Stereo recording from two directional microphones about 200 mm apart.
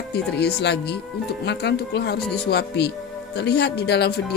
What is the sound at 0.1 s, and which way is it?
Speech, 55° left (ahead or behind).